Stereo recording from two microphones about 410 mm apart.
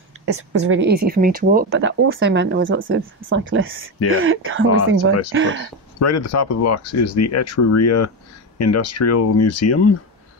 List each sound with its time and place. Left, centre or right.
0.2 s speech: right
5.9 s speech: left